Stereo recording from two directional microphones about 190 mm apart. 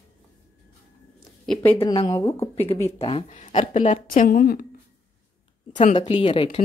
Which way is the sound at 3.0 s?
30° left (ahead or behind).